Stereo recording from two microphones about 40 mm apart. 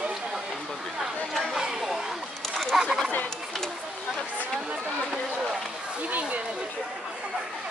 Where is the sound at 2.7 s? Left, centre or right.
Centre.